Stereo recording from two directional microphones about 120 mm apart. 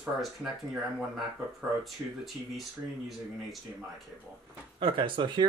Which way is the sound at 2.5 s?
Centre (ahead or behind).